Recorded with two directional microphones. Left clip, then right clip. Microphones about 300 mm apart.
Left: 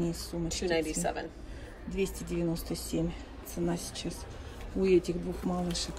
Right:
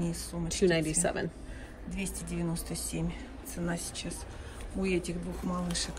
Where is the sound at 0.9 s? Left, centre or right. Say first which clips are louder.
Right 2 dB; right.